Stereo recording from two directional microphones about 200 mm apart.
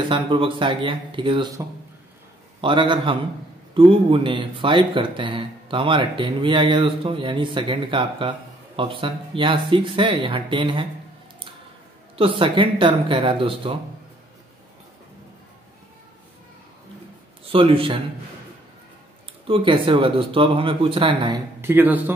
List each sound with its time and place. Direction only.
0.1 s speech: 25° right (ahead or behind)
2.6 s speech: 25° right (ahead or behind)
12.2 s speech: 25° right (ahead or behind)
17.5 s speech: 25° right (ahead or behind)
19.4 s speech: 25° right (ahead or behind)
21.5 s speech: 10° right (ahead or behind)